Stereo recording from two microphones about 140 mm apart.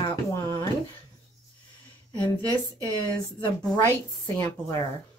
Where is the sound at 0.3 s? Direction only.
20° left (ahead or behind).